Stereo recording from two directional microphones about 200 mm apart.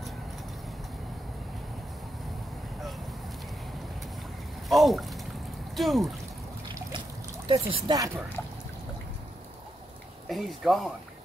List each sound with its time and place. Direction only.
4.6 s speech: centre (ahead or behind)
7.4 s speech: 25° right (ahead or behind)
10.2 s speech: centre (ahead or behind)